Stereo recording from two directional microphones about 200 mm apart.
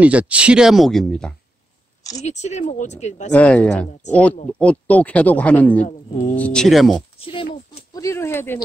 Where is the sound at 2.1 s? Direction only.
35° left (ahead or behind).